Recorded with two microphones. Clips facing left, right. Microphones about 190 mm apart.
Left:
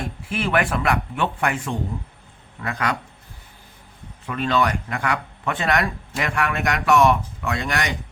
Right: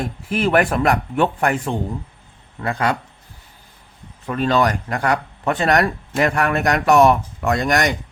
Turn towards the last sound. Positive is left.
turn(degrees=-45)  # may be behind; listen again after turning